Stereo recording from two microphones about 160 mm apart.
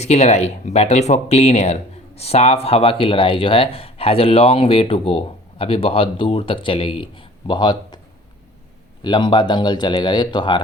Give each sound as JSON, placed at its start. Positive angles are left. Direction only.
{"t": 0.0, "sound": "speech", "side_deg": 45}
{"t": 9.0, "sound": "speech", "side_deg": 30}